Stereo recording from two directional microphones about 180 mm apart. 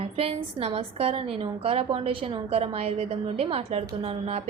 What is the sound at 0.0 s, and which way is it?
A woman's voice, 30° right (ahead or behind).